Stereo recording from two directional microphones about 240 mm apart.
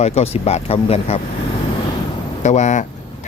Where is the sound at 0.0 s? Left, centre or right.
Left.